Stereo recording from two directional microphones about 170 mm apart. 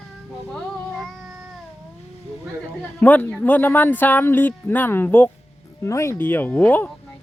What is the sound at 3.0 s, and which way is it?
Speech, 10° left (ahead or behind).